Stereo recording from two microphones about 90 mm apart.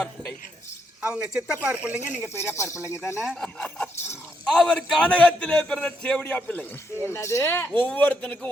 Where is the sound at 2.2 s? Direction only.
25° left (ahead or behind).